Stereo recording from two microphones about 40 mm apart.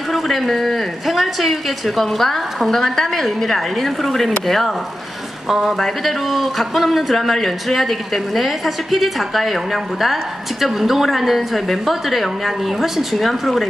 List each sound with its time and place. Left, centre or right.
0.1 s speech: centre